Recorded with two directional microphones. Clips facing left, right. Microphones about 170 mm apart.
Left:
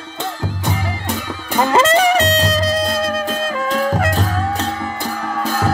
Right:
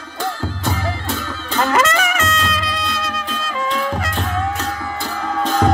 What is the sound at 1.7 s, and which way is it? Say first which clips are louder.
Music: left 6 dB; 30° left (ahead or behind).